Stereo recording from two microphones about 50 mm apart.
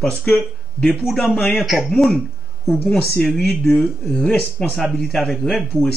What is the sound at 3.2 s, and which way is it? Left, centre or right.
Speech, centre.